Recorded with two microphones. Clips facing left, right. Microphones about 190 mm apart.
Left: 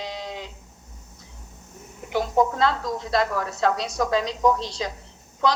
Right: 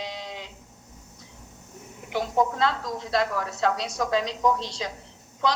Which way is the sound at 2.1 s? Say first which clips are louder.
Left 3 dB; 40° left (ahead or behind).